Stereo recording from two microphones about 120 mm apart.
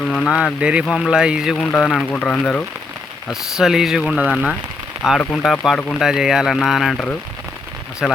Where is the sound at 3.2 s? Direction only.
5° right (ahead or behind).